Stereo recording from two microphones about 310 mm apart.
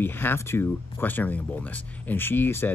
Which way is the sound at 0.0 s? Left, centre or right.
Centre.